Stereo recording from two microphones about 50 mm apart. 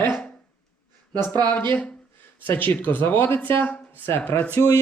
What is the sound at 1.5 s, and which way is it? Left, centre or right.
Speech, left.